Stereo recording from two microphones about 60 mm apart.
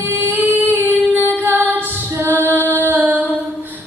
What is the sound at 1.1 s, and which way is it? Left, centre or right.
Music, right.